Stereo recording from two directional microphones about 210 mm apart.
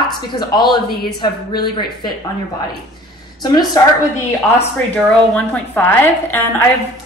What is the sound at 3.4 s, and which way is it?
Speech, 20° left (ahead or behind).